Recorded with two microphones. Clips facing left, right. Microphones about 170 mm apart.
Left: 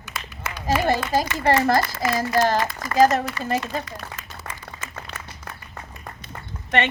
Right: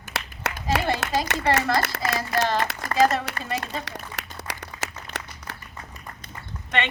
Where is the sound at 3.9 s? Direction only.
80° right.